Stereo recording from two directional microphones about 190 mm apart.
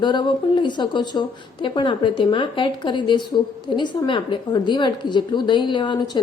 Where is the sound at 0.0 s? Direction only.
25° left (ahead or behind).